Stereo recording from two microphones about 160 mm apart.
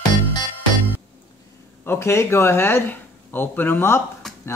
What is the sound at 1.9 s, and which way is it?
Speech, 15° left (ahead or behind).